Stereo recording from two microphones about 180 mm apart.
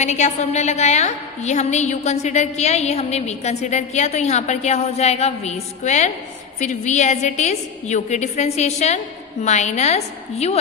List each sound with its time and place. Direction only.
0.0 s a woman's voice: 40° left (ahead or behind)